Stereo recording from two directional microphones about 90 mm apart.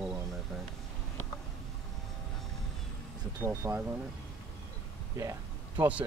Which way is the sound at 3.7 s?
15° right (ahead or behind).